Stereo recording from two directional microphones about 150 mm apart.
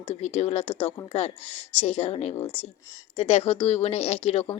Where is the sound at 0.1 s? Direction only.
45° left (ahead or behind).